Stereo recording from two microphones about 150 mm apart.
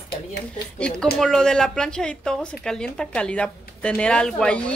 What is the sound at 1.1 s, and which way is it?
Speech, 5° left (ahead or behind).